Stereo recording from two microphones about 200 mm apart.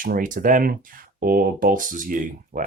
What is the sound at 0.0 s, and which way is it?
Speech, 40° right (ahead or behind).